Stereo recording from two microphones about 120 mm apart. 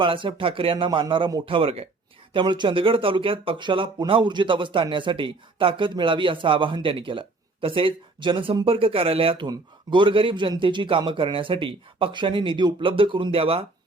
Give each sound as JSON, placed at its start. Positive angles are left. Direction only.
{"t": 0.0, "sound": "speech", "side_deg": -45}